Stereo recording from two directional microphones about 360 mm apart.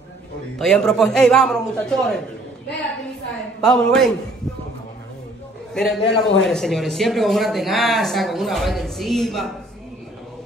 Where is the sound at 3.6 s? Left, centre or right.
Centre.